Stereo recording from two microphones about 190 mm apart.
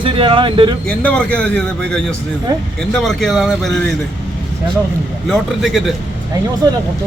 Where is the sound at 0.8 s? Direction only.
5° left (ahead or behind).